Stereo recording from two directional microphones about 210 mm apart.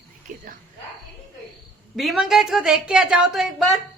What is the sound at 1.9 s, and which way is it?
A woman's voice, centre (ahead or behind).